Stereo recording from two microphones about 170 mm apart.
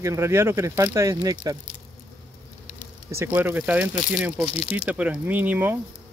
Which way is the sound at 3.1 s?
10° right (ahead or behind).